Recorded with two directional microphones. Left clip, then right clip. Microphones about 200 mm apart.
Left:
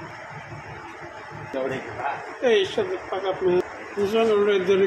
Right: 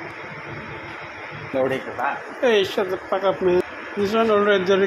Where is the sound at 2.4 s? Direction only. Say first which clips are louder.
Right 2 dB; 10° right (ahead or behind).